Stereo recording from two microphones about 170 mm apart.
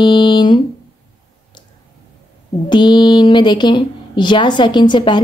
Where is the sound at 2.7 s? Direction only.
25° left (ahead or behind).